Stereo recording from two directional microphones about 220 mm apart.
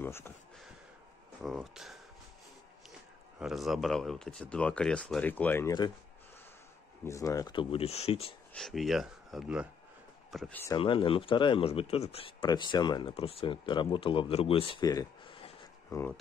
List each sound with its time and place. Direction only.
0.0 s a sound: 10° left (ahead or behind)
1.4 s speech: centre (ahead or behind)
3.3 s speech: centre (ahead or behind)
7.1 s speech: 15° left (ahead or behind)
8.5 s speech: centre (ahead or behind)
10.8 s speech: 25° left (ahead or behind)